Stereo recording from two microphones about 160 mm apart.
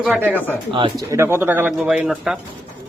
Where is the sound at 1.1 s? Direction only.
15° right (ahead or behind).